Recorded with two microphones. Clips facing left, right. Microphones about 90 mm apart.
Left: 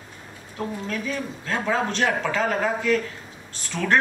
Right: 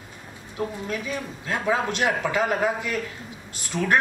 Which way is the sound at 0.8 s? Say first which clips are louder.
Left 1 dB; 15° right (ahead or behind).